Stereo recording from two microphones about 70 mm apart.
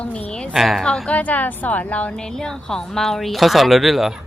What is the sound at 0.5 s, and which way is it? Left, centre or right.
Speech, centre.